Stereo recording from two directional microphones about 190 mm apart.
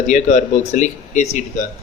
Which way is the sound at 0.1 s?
35° left (ahead or behind).